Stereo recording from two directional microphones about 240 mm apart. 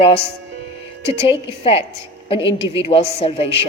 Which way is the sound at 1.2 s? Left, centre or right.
Left.